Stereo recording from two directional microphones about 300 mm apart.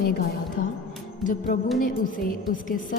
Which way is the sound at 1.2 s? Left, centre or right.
Left.